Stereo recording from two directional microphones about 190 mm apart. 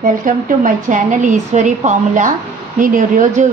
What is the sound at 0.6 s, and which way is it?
A woman's voice, 40° right (ahead or behind).